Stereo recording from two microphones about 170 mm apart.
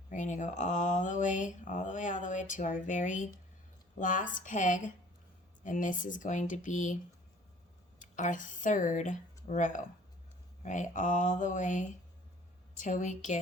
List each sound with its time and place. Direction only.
0.1 s speech: 45° left (ahead or behind)